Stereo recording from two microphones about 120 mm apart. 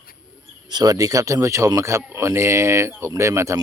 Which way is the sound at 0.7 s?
35° right (ahead or behind).